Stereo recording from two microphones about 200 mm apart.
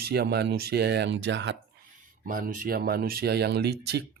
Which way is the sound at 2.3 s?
45° right (ahead or behind).